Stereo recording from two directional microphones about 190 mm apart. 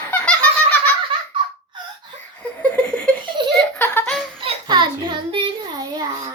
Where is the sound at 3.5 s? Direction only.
10° left (ahead or behind).